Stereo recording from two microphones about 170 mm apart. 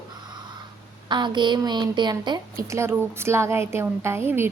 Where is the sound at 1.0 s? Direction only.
25° right (ahead or behind).